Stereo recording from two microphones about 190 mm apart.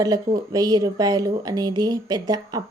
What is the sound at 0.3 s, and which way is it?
Speech, 20° right (ahead or behind).